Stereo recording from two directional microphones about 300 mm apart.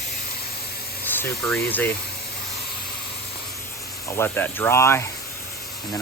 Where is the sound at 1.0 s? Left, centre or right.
Centre.